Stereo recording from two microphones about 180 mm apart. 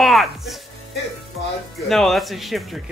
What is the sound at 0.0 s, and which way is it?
Music, centre (ahead or behind).